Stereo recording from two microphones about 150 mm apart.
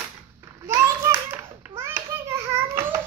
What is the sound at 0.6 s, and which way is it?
Hands, 15° right (ahead or behind).